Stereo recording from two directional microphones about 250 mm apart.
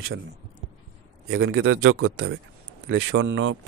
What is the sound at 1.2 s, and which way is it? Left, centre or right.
A man's voice, right.